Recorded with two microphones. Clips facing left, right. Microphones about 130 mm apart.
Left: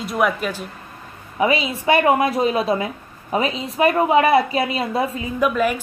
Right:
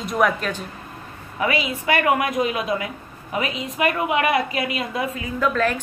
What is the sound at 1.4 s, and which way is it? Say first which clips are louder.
A woman's voice: left 4 dB; 25° left (ahead or behind).